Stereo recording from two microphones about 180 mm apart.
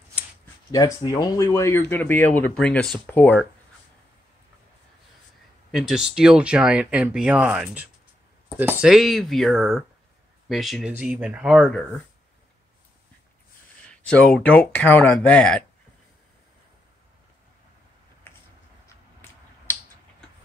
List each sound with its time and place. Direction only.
0.7 s speech: 20° left (ahead or behind)
5.7 s speech: centre (ahead or behind)
14.0 s speech: 5° left (ahead or behind)